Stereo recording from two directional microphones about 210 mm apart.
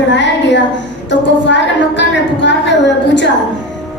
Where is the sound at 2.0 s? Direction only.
60° left (ahead or behind).